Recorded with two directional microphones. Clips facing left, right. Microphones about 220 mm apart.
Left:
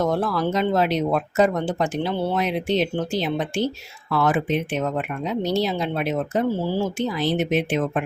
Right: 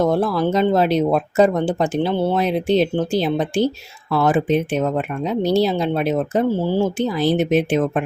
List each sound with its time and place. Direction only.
0.0 s speech: 30° right (ahead or behind)